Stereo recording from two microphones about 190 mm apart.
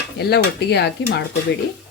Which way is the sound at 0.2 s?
60° left (ahead or behind).